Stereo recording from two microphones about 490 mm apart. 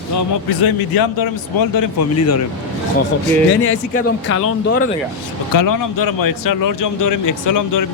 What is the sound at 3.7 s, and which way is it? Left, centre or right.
Speech, left.